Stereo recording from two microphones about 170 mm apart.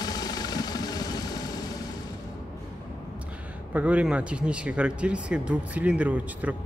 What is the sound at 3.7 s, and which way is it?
Speech, 10° right (ahead or behind).